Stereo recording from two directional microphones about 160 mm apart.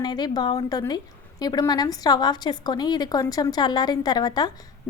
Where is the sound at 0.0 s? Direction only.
25° left (ahead or behind).